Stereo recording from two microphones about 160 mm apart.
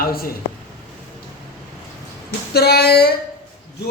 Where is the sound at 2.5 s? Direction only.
80° left.